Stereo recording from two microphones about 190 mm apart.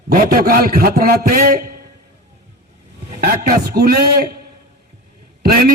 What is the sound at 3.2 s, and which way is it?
A man's voice, 50° right (ahead or behind).